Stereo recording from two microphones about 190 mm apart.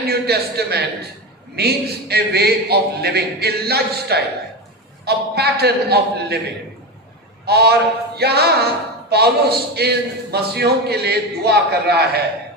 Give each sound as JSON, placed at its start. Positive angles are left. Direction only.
{"t": 0.1, "sound": "a man's voice", "side_deg": -55}
{"t": 7.4, "sound": "speech", "side_deg": -55}